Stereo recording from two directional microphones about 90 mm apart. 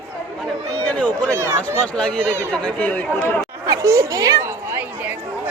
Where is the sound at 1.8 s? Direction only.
10° left (ahead or behind).